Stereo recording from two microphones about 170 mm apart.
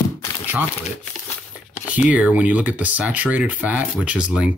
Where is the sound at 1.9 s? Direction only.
10° right (ahead or behind).